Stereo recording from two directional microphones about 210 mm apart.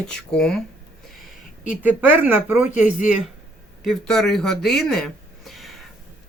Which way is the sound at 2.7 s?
35° left (ahead or behind).